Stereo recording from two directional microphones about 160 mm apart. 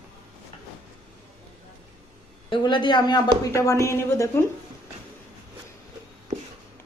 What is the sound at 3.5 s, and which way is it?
Speech, 20° left (ahead or behind).